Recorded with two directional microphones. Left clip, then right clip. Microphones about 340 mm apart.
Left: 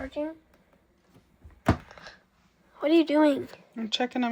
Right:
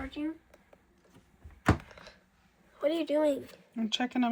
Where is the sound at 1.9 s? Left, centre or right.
Left.